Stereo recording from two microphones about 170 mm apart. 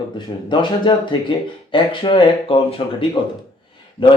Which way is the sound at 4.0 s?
55° left (ahead or behind).